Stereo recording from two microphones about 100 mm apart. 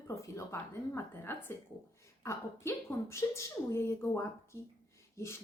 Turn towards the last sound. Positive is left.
turn(degrees=30)  # may be behind; listen again after turning